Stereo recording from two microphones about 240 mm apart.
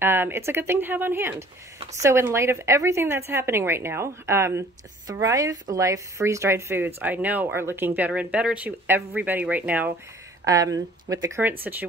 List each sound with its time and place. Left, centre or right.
0.0 s a woman's voice: centre